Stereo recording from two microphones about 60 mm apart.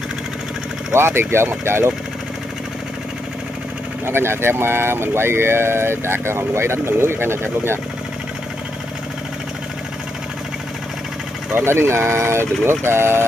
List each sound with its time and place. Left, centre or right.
0.9 s speech: right
4.0 s speech: right
11.5 s speech: right